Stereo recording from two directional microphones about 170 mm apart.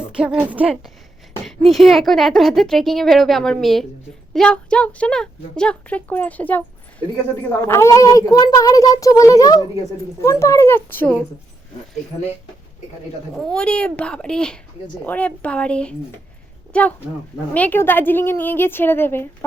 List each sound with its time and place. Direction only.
0.2 s a woman's voice: 5° right (ahead or behind); by 6.7 s 10° left (ahead or behind)
7.7 s a child's voice: 15° left (ahead or behind)
13.3 s a woman's voice: 5° left (ahead or behind)